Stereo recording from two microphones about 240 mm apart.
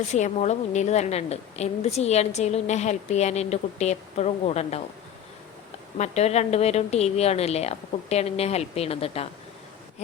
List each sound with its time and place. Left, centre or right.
0.1 s a woman's voice: left
6.0 s a woman's voice: left